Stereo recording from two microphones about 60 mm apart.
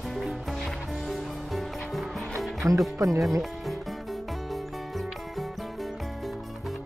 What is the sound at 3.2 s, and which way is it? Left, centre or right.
Speech, centre.